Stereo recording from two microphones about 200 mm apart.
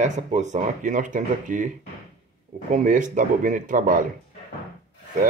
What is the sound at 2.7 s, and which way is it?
Speech, 40° right (ahead or behind).